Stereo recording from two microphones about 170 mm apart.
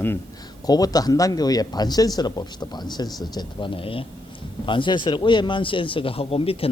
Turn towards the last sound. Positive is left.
turn(degrees=35)  # may be behind; listen again after turning